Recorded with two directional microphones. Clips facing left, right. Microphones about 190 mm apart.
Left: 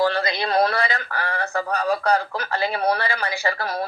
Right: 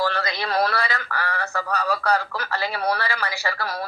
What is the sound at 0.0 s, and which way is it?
A man's voice, 15° left (ahead or behind).